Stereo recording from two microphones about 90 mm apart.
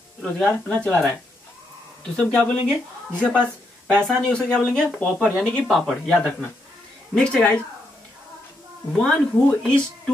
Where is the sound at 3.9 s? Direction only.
10° left (ahead or behind).